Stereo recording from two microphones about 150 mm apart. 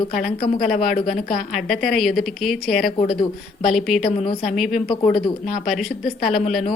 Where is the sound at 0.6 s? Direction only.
Centre (ahead or behind).